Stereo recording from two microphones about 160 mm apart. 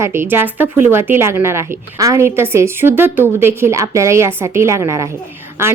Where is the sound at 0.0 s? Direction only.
15° right (ahead or behind).